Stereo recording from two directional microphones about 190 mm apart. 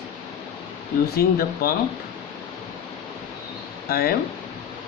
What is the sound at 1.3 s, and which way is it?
Speech, 50° left (ahead or behind).